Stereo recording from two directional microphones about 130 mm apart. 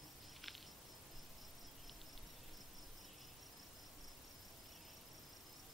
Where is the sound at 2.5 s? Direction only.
Centre (ahead or behind).